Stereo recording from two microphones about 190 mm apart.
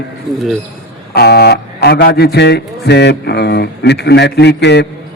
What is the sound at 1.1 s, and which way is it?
Speech, 60° left (ahead or behind).